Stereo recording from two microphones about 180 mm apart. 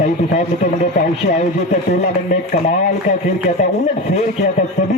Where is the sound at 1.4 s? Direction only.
40° left (ahead or behind).